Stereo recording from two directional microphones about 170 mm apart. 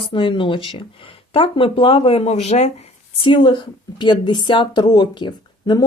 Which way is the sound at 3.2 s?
30° left (ahead or behind).